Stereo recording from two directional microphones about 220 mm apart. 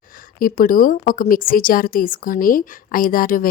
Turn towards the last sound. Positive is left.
turn(degrees=40)  # may be behind; listen again after turning